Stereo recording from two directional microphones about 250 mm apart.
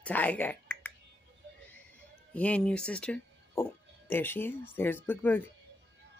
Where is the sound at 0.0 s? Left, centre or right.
Centre.